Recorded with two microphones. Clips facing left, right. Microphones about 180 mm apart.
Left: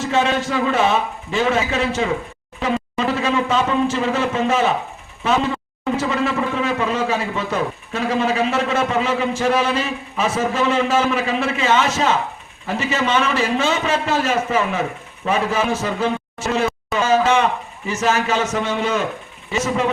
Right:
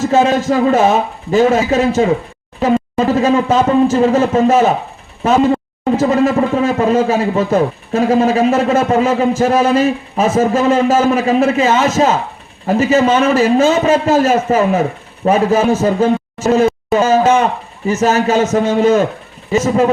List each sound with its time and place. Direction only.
0.0 s a man's voice: 45° right (ahead or behind)